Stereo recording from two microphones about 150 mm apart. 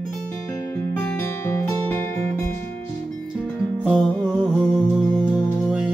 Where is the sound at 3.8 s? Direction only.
Centre (ahead or behind).